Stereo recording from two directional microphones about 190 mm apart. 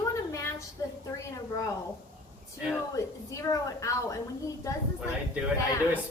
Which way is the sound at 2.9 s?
15° left (ahead or behind).